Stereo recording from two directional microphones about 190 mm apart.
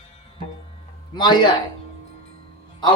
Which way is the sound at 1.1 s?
25° left (ahead or behind).